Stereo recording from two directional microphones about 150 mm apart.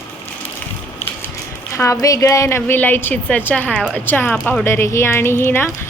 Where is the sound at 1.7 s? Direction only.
20° left (ahead or behind).